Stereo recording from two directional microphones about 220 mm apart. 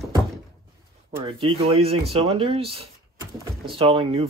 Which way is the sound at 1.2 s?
25° right (ahead or behind).